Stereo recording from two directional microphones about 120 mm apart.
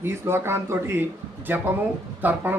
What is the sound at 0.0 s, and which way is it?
Mantra, 20° right (ahead or behind).